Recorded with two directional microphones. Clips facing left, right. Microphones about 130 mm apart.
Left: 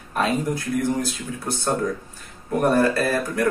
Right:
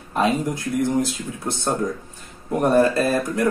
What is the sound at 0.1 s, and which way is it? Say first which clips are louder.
Speech: right 2 dB; 20° right (ahead or behind).